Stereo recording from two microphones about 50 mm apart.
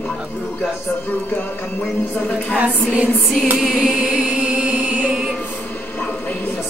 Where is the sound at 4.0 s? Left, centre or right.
Right.